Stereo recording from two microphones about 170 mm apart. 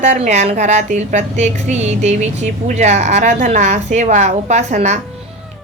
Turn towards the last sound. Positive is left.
turn(degrees=-45)  # may be behind; listen again after turning